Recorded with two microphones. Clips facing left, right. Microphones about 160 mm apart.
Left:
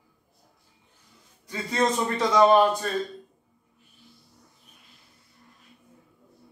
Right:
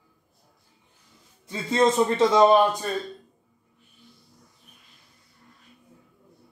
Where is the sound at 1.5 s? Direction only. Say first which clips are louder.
Right 4 dB; 25° right (ahead or behind).